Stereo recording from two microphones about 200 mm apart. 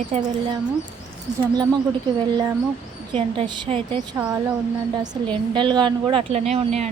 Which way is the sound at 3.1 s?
25° right (ahead or behind).